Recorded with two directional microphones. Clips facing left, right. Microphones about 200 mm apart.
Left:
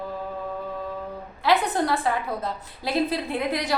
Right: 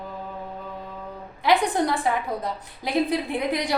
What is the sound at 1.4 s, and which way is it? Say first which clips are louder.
A woman's voice: right 1 dB; 15° right (ahead or behind).